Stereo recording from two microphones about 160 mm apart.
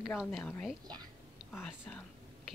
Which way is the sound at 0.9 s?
25° right (ahead or behind).